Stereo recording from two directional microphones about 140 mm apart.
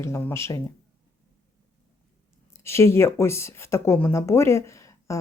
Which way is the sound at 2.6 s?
20° left (ahead or behind).